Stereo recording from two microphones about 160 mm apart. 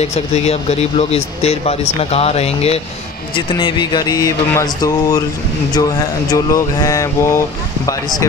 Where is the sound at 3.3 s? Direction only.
30° left (ahead or behind).